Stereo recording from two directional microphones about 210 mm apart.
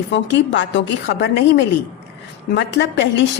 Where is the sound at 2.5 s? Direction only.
55° left (ahead or behind).